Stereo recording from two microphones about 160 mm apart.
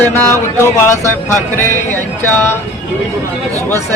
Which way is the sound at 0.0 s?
15° left (ahead or behind).